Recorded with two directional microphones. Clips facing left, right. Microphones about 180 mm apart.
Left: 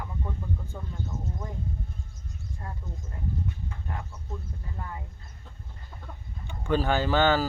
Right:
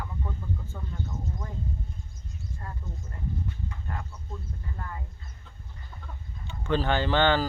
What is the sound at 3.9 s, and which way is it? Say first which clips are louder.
Speech: left 4 dB; 15° left (ahead or behind).